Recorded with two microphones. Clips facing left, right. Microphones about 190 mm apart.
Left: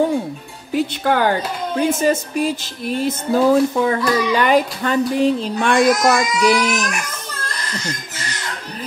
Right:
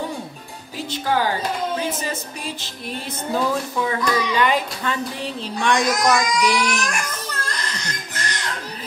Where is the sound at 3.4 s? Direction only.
45° left (ahead or behind).